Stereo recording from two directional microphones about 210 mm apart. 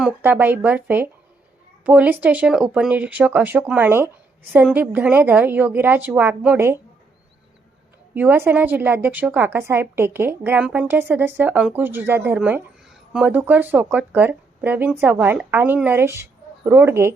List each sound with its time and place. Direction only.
0.0 s a woman's voice: 10° right (ahead or behind)
8.1 s a woman's voice: 10° right (ahead or behind)